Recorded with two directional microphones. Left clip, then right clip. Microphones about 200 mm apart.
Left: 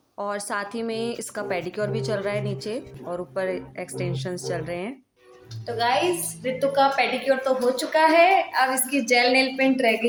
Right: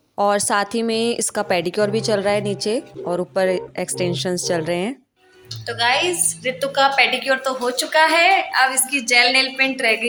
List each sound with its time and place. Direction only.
0.2 s speech: 40° right (ahead or behind)
5.6 s a woman's voice: centre (ahead or behind); by 10.1 s 15° left (ahead or behind)